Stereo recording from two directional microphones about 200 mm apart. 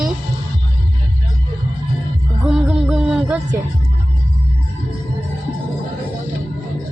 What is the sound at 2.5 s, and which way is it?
Music, centre (ahead or behind).